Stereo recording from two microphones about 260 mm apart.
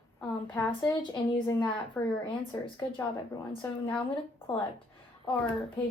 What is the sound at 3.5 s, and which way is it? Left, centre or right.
Speech, centre.